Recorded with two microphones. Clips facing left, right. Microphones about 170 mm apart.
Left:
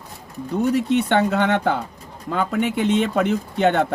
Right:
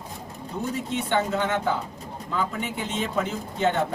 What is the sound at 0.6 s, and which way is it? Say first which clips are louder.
Speech: left 10 dB; 70° left (ahead or behind).